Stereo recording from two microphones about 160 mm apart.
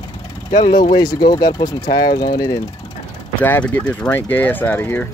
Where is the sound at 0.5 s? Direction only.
25° left (ahead or behind).